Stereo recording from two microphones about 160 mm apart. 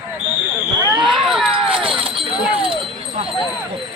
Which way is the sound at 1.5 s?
35° right (ahead or behind).